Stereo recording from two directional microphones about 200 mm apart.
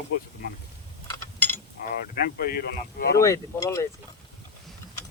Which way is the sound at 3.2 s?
15° left (ahead or behind).